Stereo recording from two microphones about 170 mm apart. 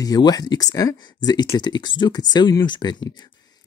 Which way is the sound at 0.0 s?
25° left (ahead or behind).